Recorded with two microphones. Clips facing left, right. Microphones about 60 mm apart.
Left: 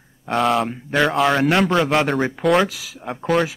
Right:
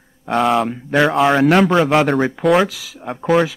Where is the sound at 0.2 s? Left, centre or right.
Centre.